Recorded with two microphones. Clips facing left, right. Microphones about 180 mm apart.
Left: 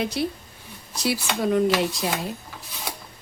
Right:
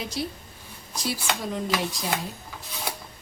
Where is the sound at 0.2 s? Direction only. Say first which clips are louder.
Left 5 dB; 60° left (ahead or behind).